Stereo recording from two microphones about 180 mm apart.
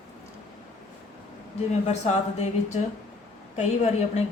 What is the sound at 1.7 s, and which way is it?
Speech, 40° left (ahead or behind).